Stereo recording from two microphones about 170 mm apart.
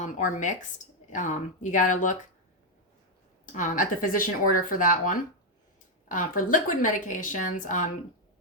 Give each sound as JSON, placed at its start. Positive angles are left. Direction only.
{"t": 0.0, "sound": "speech", "side_deg": 45}
{"t": 3.4, "sound": "speech", "side_deg": 50}